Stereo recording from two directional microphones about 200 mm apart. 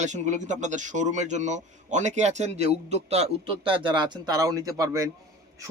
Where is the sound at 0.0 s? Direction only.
35° right (ahead or behind).